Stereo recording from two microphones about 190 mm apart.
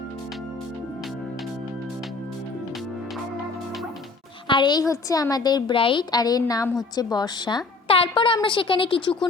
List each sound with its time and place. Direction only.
4.4 s a woman's voice: 25° left (ahead or behind)